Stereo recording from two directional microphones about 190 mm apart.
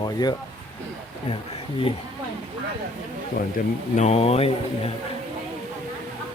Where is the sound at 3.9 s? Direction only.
35° left (ahead or behind).